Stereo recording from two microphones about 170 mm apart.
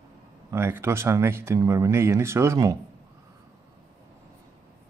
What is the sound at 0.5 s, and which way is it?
Speech, 15° right (ahead or behind).